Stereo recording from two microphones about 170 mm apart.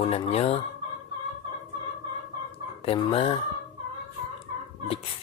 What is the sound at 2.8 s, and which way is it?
Speech, 35° left (ahead or behind).